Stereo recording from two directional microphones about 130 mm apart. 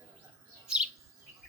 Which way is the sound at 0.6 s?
5° right (ahead or behind).